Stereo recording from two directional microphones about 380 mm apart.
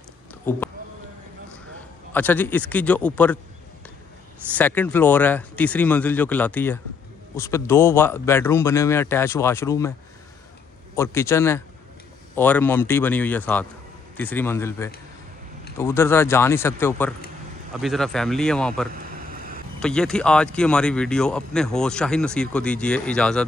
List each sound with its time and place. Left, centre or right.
0.5 s speech: centre
2.1 s speech: centre
4.5 s speech: centre
11.0 s speech: centre
18.9 s a sound: right
19.8 s speech: centre